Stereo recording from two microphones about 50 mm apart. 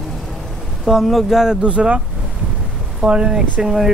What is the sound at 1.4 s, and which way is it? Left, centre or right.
Speech, centre.